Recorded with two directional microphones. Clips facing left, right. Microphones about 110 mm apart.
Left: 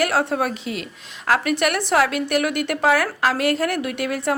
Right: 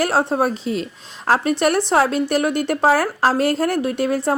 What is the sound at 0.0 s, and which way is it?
A woman's voice, 30° right (ahead or behind).